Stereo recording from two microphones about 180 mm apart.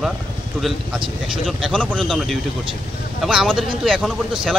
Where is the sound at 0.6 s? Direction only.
Centre (ahead or behind).